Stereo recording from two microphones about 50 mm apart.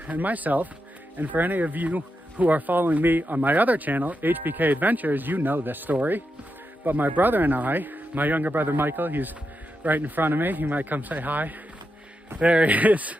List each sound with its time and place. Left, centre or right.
0.0 s speech: right